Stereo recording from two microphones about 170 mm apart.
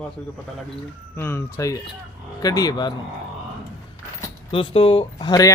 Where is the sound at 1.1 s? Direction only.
15° left (ahead or behind).